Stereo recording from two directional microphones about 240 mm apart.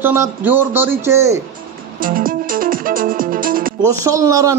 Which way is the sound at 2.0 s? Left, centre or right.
Right.